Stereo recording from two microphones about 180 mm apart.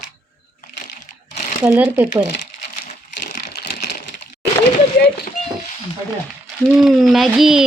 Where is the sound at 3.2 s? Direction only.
65° left (ahead or behind).